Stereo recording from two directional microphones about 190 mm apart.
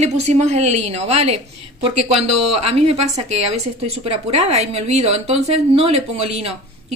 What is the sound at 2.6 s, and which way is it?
A woman's voice, 35° right (ahead or behind).